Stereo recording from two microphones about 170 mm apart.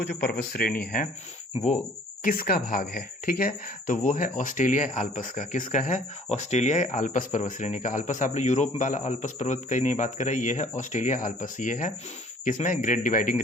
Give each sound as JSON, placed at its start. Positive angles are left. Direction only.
{"t": 0.0, "sound": "speech", "side_deg": 70}
{"t": 2.2, "sound": "a man's voice", "side_deg": 60}